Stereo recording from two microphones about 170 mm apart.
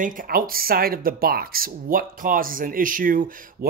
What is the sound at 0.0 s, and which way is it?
Speech, 55° right (ahead or behind).